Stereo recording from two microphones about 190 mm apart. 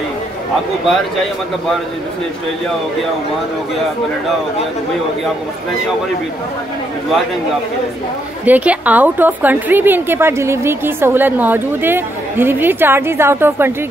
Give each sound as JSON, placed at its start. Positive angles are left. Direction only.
{"t": 8.5, "sound": "a woman's voice", "side_deg": -10}